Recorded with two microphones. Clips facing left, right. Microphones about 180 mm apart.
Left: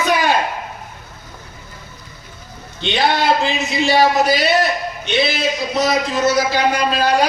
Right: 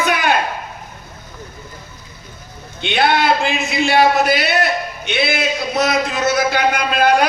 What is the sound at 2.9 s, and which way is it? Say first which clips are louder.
A man's voice: right 1 dB; 60° right (ahead or behind).